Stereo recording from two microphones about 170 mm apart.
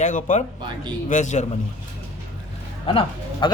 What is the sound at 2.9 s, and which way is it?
Speech, 30° left (ahead or behind).